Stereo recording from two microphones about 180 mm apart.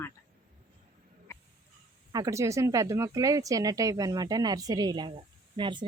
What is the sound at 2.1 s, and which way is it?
Speech, 20° right (ahead or behind).